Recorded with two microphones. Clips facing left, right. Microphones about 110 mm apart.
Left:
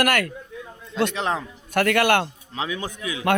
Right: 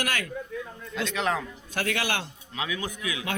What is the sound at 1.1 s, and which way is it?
Speech, 30° left (ahead or behind).